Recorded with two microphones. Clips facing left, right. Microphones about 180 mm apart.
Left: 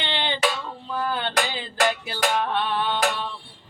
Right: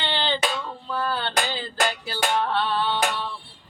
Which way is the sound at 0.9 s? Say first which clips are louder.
Left 1 dB; 15° left (ahead or behind).